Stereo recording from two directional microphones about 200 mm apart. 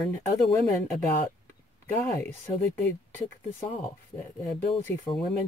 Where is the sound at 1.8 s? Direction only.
10° left (ahead or behind).